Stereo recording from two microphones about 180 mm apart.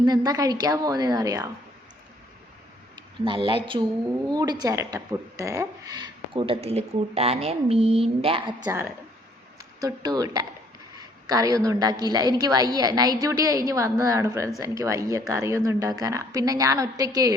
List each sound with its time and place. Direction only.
0.0 s speech: 20° right (ahead or behind)
3.2 s speech: 30° right (ahead or behind)